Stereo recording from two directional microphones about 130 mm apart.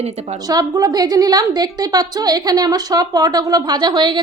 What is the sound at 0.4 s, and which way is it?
A woman's voice, 30° right (ahead or behind).